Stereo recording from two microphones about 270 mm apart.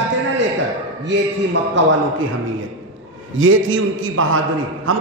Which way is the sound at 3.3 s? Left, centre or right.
Right.